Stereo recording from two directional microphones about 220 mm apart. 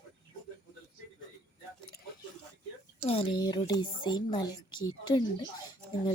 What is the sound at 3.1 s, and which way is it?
A woman's voice, 25° left (ahead or behind).